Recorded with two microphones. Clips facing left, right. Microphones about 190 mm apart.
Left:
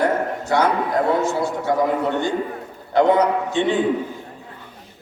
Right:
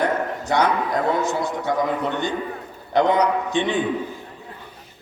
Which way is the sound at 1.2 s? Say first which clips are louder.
Left 2 dB; 20° right (ahead or behind).